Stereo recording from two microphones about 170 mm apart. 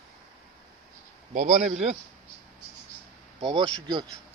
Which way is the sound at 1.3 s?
45° right (ahead or behind).